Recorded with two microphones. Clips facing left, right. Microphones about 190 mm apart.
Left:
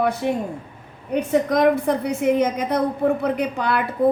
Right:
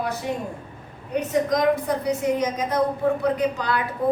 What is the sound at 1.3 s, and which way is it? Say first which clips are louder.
A woman's voice: left 3 dB; 60° left (ahead or behind).